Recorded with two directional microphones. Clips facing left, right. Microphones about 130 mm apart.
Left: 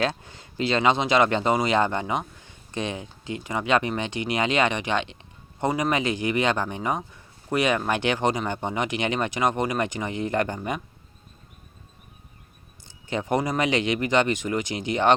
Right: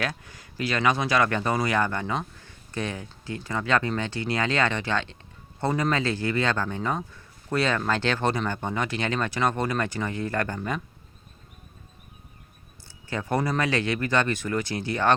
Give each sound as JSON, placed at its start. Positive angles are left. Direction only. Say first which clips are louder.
{"t": 0.0, "sound": "speech", "louder": "left 5 dB", "side_deg": 25}
{"t": 12.9, "sound": "speech", "louder": "left 3 dB", "side_deg": 20}